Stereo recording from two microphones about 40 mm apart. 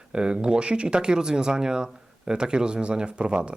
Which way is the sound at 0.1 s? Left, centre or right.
Right.